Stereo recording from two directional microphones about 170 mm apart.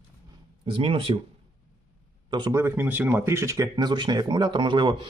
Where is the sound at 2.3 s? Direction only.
20° right (ahead or behind).